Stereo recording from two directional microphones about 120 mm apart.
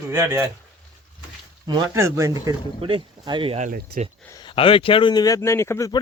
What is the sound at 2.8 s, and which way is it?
Speech, 45° right (ahead or behind).